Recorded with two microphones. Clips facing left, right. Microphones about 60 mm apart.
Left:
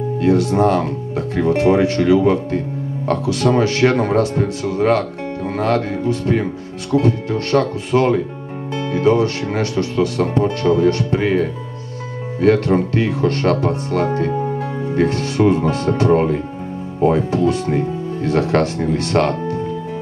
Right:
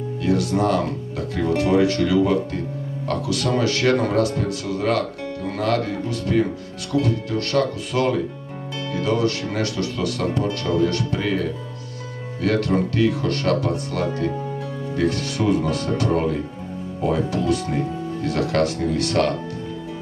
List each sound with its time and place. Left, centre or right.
0.2 s speech: left